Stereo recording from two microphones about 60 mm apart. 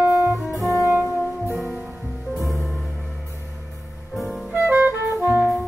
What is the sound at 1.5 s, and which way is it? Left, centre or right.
Music, centre.